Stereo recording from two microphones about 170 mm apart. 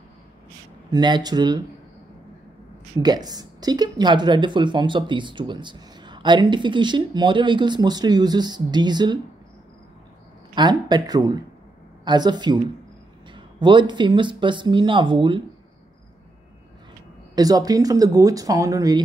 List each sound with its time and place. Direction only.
0.8 s speech: 25° right (ahead or behind)
3.0 s speech: 25° right (ahead or behind)
10.5 s speech: 25° right (ahead or behind)
17.4 s speech: 20° right (ahead or behind)